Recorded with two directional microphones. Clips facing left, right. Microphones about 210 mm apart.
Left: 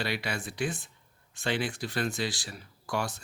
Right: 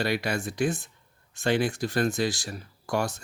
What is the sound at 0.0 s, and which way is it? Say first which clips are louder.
Speech: right 6 dB; 45° right (ahead or behind).